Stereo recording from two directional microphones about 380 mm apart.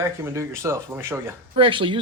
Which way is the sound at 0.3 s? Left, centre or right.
Centre.